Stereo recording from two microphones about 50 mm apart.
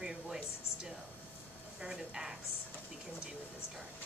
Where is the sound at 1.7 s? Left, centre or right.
Centre.